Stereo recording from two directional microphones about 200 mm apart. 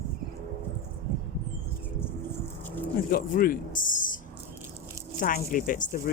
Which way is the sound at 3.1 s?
45° left (ahead or behind).